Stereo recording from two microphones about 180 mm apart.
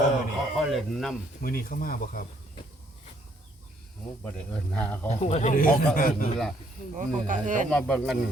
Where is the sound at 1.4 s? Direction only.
55° left (ahead or behind).